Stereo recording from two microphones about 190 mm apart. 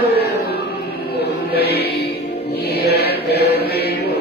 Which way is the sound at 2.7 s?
60° left (ahead or behind).